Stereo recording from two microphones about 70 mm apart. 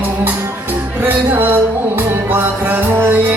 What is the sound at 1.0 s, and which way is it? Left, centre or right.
Music, right.